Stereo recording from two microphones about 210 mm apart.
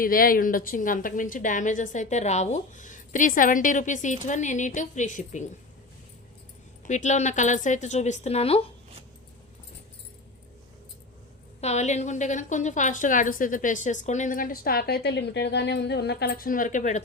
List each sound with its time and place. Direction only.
0.0 s a woman's voice: 45° left (ahead or behind)
6.8 s a woman's voice: 35° left (ahead or behind)
11.6 s a woman's voice: 30° left (ahead or behind)